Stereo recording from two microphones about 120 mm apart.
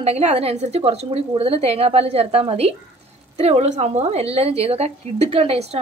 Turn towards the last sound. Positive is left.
turn(degrees=-60)  # may be behind; listen again after turning